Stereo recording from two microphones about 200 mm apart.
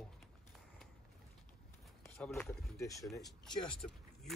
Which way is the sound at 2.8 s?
15° left (ahead or behind).